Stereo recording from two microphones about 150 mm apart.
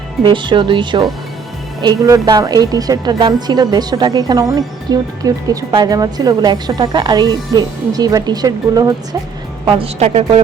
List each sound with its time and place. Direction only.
0.2 s a woman's voice: 30° right (ahead or behind)
9.6 s speech: 40° right (ahead or behind)